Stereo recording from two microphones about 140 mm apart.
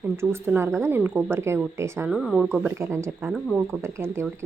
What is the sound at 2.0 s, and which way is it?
Speech, 5° right (ahead or behind).